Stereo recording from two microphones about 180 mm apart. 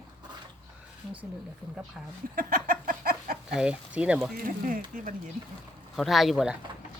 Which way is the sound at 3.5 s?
5° right (ahead or behind).